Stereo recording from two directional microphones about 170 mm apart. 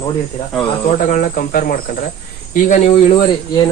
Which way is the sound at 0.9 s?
45° left (ahead or behind).